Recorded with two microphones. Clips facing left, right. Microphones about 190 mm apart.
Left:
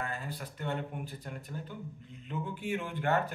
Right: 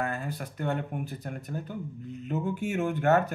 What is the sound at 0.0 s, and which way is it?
Speech, 45° right (ahead or behind).